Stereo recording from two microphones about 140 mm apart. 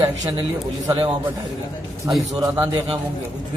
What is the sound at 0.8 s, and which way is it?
Speech, 35° right (ahead or behind).